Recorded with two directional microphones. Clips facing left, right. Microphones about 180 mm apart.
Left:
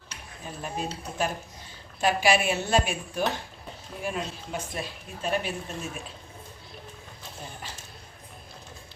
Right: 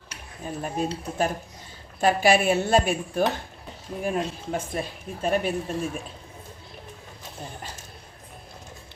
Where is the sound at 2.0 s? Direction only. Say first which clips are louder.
Right 4 dB; 50° right (ahead or behind).